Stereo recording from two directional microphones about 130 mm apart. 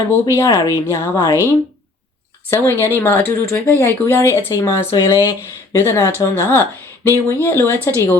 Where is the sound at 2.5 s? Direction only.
20° left (ahead or behind).